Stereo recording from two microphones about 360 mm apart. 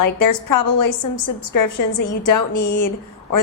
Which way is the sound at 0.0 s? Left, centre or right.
Left.